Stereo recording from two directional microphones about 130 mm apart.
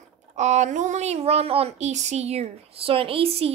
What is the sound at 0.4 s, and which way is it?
Speech, 70° right (ahead or behind).